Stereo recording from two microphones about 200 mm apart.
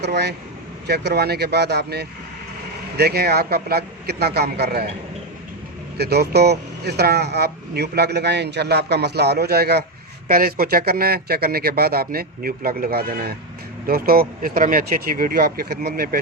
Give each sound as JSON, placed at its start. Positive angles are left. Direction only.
{"t": 0.0, "sound": "speech", "side_deg": -55}
{"t": 6.0, "sound": "speech", "side_deg": -55}